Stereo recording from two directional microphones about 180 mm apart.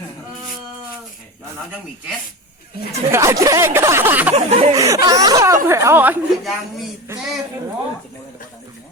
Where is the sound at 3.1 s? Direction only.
15° right (ahead or behind).